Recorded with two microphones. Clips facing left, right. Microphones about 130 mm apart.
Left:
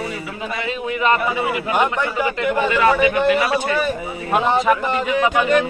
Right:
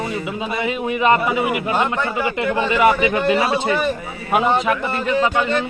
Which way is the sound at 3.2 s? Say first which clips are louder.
Even; 25° right (ahead or behind).